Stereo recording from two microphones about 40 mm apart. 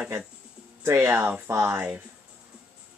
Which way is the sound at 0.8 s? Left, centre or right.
Right.